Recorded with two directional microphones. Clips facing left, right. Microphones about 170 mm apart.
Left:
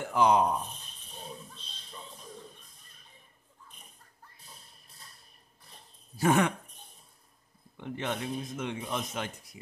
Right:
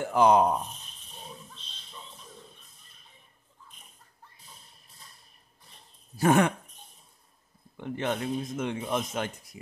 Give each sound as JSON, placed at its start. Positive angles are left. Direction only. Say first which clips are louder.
{"t": 0.1, "sound": "speech", "louder": "right 3 dB", "side_deg": -50}
{"t": 6.1, "sound": "speech", "louder": "right 3 dB", "side_deg": -50}
{"t": 7.7, "sound": "speech", "louder": "right 4 dB", "side_deg": -45}